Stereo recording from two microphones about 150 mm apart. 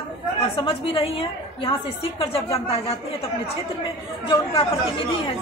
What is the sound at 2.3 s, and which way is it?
Speech, 40° left (ahead or behind).